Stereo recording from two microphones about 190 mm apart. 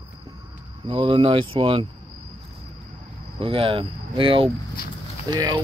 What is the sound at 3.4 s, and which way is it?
Speech, 30° right (ahead or behind).